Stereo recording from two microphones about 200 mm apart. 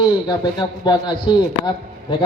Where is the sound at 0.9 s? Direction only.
25° left (ahead or behind).